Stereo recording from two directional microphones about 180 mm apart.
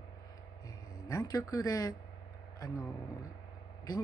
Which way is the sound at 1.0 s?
20° left (ahead or behind).